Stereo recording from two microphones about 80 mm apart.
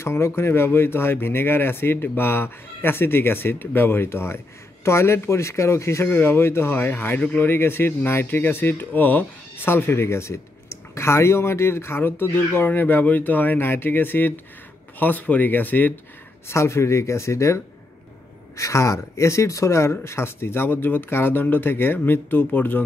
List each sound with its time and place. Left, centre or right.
0.0 s speech: left
16.4 s speech: left
18.6 s speech: left